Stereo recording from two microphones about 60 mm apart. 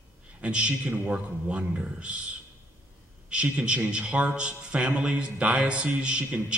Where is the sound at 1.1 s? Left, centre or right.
Right.